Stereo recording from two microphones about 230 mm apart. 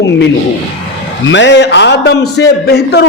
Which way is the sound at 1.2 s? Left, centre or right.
Left.